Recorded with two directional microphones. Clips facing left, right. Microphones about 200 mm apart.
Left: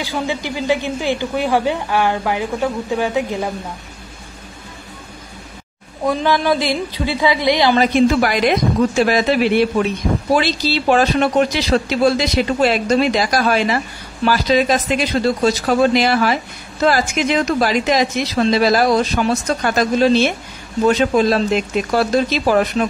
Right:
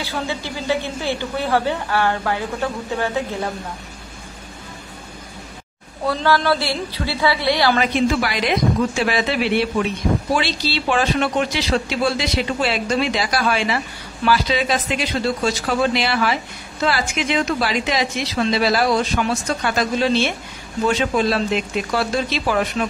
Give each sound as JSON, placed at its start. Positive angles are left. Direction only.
{"t": 0.0, "sound": "a woman's voice", "side_deg": 15}
{"t": 6.0, "sound": "a woman's voice", "side_deg": 15}
{"t": 7.8, "sound": "a woman's voice", "side_deg": 50}